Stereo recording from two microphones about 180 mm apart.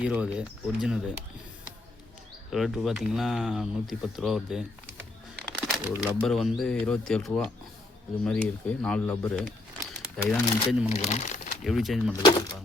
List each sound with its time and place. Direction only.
0.0 s speech: 5° right (ahead or behind)
2.5 s speech: centre (ahead or behind)
5.4 s a sound: centre (ahead or behind)
6.2 s speech: centre (ahead or behind)
10.8 s speech: 35° left (ahead or behind)
11.6 s speech: centre (ahead or behind)